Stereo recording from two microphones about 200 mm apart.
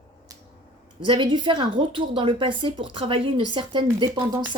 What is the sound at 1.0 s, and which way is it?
A woman's voice, 25° right (ahead or behind).